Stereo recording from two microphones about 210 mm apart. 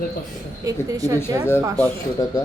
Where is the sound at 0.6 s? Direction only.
15° right (ahead or behind).